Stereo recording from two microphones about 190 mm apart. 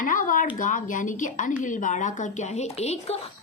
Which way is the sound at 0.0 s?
45° left (ahead or behind).